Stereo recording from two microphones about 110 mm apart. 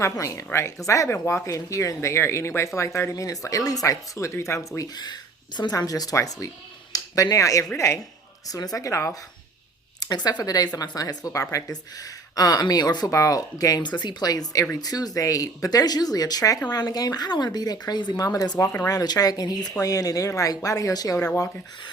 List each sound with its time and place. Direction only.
0.0 s speech: 30° left (ahead or behind)
4.9 s speech: 40° left (ahead or behind)
10.0 s speech: 35° left (ahead or behind)